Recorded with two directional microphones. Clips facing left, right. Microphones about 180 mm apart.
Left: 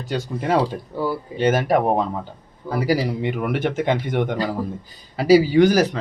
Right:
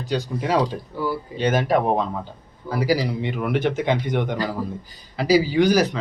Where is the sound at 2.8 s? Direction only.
50° left (ahead or behind).